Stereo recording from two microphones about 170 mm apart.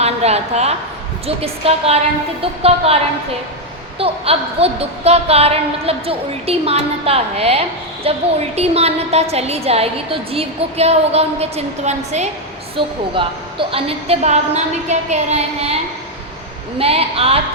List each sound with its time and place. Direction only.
0.0 s a woman's voice: 40° right (ahead or behind)
12.7 s a woman's voice: 30° right (ahead or behind)